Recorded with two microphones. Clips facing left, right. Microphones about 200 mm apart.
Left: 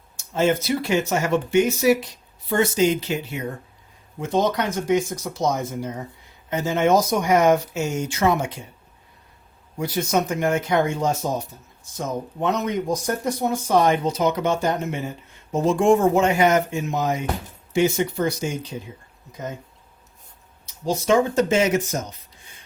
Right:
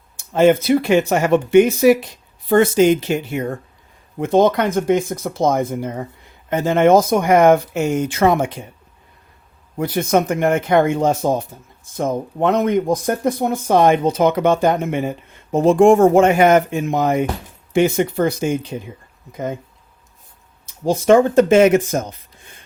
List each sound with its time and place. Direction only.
0.2 s speech: 60° right (ahead or behind)
9.7 s speech: 55° right (ahead or behind)
20.7 s speech: 55° right (ahead or behind)